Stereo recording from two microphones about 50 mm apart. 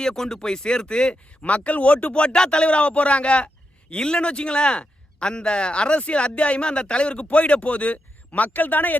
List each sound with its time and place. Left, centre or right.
0.0 s speech: centre; by 9.0 s left